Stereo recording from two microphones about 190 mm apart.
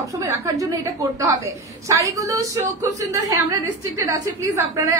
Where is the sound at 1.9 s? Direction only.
15° right (ahead or behind).